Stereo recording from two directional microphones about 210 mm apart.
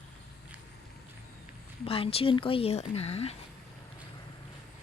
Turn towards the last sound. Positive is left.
turn(degrees=30)  # may be behind; listen again after turning